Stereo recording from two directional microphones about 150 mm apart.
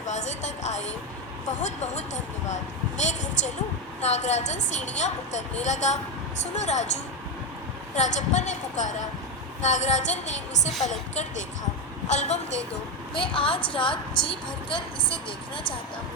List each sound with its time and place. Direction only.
0.0 s a sound: 50° left (ahead or behind)
1.5 s a woman's voice: 50° left (ahead or behind)
7.9 s a woman's voice: 50° left (ahead or behind)
13.1 s speech: 35° left (ahead or behind)